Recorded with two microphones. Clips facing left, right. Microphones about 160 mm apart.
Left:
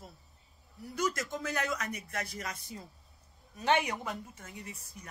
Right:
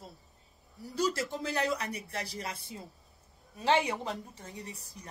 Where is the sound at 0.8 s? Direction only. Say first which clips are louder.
Right 2 dB; 30° right (ahead or behind).